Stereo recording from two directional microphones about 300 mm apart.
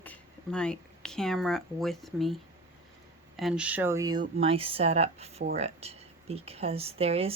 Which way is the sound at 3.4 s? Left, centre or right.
Centre.